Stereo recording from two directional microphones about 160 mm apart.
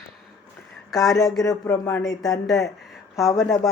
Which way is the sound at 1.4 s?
20° left (ahead or behind).